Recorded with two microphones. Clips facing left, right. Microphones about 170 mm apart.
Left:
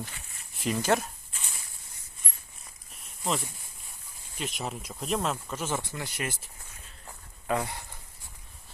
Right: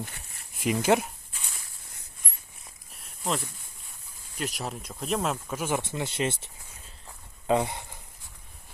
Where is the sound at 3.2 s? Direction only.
Centre (ahead or behind).